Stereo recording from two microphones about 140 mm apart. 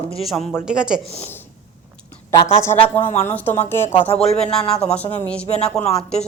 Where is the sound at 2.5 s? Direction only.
15° left (ahead or behind).